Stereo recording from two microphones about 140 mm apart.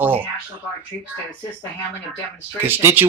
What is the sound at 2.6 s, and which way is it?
Speech, 15° right (ahead or behind).